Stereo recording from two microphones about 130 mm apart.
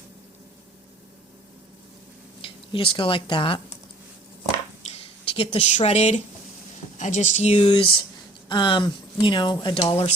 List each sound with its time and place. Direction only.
2.4 s speech: 45° left (ahead or behind)
4.9 s speech: 50° left (ahead or behind)
7.0 s speech: 70° left (ahead or behind)
7.6 s speech: 45° left (ahead or behind)